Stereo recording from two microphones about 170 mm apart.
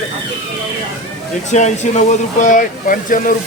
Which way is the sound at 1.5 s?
45° left (ahead or behind).